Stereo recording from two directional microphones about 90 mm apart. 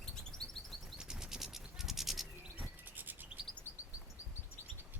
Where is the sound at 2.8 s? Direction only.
20° right (ahead or behind).